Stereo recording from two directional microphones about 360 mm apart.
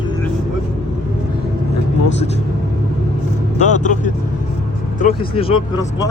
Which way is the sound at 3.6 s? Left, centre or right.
Centre.